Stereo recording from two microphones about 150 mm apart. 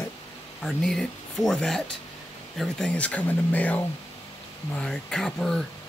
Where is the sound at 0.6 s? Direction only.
5° left (ahead or behind).